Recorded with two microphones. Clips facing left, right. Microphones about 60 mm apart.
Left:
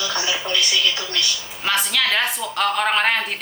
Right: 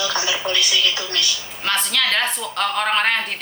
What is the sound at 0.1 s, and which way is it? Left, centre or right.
Speech, right.